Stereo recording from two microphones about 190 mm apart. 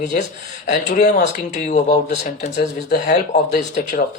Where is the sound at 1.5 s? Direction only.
40° left (ahead or behind).